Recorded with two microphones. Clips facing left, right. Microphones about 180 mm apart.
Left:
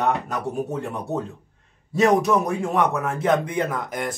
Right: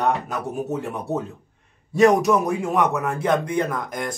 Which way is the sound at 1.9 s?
Centre (ahead or behind).